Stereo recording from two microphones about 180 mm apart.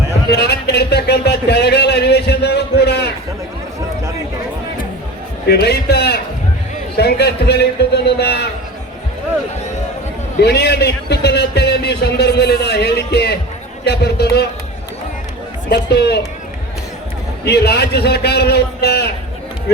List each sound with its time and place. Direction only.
0.3 s a sound: 65° left (ahead or behind)
5.5 s a man's voice: 65° left (ahead or behind)
10.4 s a sound: 65° left (ahead or behind)
13.8 s a man's voice: 65° left (ahead or behind)
15.7 s a man's voice: 65° left (ahead or behind)
17.4 s a man's voice: 65° left (ahead or behind)